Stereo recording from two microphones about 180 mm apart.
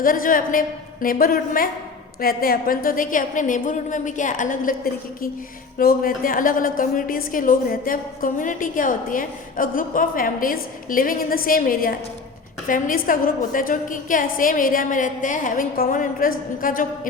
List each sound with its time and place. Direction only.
0.0 s a woman's voice: 50° left (ahead or behind)
5.8 s a woman's voice: 55° left (ahead or behind)